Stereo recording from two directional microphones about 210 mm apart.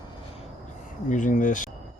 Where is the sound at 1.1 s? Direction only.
35° left (ahead or behind).